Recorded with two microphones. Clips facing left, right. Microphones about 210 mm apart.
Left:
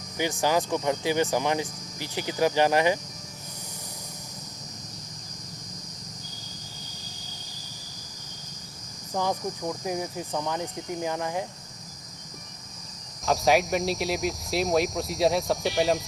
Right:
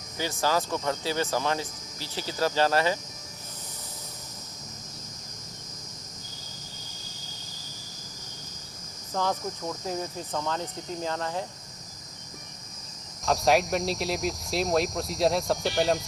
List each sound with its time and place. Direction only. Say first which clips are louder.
0.2 s speech: left 2 dB; 15° left (ahead or behind)
9.1 s speech: left 1 dB; 15° left (ahead or behind)
13.2 s speech: left 1 dB; centre (ahead or behind)